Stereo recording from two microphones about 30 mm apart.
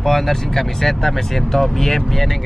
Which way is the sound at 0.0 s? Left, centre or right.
Centre.